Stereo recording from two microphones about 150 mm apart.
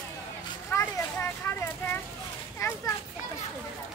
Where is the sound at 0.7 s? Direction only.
15° left (ahead or behind).